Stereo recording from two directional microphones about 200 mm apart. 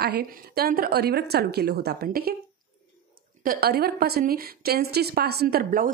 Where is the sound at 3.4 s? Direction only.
50° right (ahead or behind).